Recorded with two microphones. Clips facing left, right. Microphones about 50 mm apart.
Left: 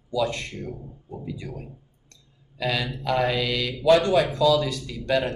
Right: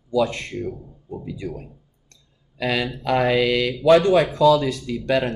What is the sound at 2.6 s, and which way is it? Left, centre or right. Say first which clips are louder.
Speech: right 3 dB; right.